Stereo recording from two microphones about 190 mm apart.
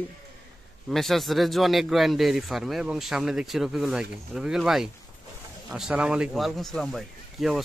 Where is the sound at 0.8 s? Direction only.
Centre (ahead or behind).